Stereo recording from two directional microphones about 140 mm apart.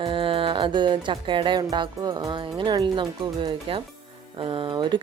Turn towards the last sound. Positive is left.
turn(degrees=-35)  # may be behind; listen again after turning